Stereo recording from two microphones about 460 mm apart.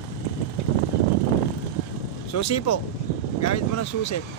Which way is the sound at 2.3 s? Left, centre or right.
Left.